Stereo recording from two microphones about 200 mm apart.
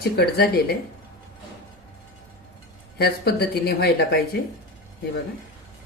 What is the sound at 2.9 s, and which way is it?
Speech, 55° left (ahead or behind).